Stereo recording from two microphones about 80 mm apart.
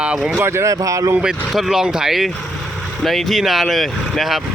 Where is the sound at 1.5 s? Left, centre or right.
Centre.